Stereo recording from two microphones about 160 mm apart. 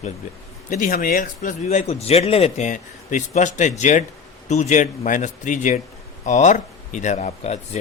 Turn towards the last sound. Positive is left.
turn(degrees=45)  # may be behind; listen again after turning